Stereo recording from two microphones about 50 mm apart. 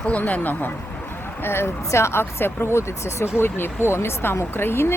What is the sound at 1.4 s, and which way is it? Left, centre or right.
Speech, left.